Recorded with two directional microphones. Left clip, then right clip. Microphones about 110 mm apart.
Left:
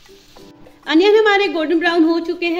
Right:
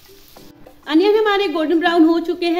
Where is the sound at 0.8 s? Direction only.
20° left (ahead or behind).